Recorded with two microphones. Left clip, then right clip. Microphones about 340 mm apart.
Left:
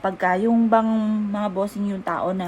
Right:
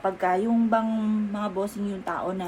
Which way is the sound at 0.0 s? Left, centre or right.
Left.